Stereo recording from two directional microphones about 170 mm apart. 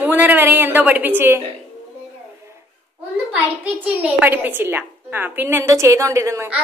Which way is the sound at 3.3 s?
10° right (ahead or behind).